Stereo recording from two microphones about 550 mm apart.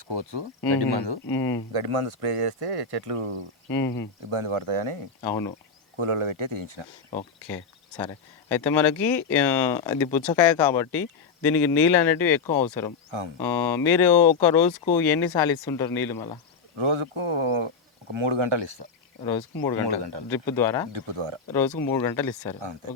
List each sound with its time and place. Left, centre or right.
0.1 s speech: right
1.3 s speech: centre
1.7 s speech: right
3.7 s speech: centre
4.3 s speech: right
5.2 s speech: centre
6.0 s speech: right
7.1 s speech: centre
13.1 s speech: right
13.4 s speech: centre
16.7 s speech: right
20.3 s speech: centre
20.9 s speech: right
21.8 s speech: centre